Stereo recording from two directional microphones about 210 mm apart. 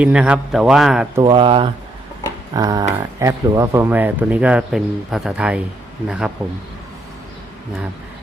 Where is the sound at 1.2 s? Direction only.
25° right (ahead or behind); by 6.3 s 5° right (ahead or behind).